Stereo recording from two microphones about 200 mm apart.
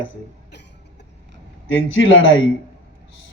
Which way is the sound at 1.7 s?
75° left (ahead or behind).